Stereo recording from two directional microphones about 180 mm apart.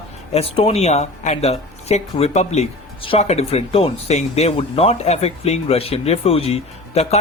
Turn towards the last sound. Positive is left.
turn(degrees=35)  # may be behind; listen again after turning